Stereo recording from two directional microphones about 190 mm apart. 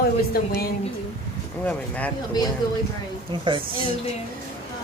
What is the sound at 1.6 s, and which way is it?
Speech, 10° left (ahead or behind).